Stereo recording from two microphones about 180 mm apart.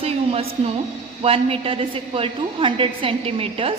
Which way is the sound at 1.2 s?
35° right (ahead or behind).